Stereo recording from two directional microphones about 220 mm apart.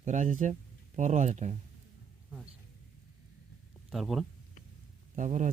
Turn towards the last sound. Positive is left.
turn(degrees=-35)  # may be behind; listen again after turning